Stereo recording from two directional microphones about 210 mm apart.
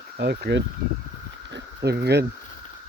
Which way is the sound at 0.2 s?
50° right (ahead or behind).